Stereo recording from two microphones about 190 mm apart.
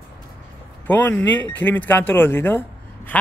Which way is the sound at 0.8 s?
10° left (ahead or behind).